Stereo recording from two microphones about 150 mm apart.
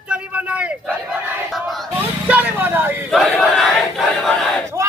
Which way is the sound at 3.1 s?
Centre (ahead or behind).